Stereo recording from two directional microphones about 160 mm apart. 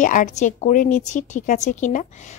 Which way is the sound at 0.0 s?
50° left (ahead or behind).